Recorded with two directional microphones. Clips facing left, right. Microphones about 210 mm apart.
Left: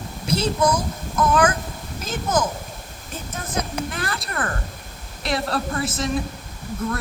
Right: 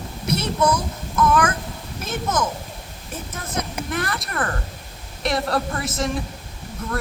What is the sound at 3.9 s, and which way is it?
A woman's voice, 30° left (ahead or behind).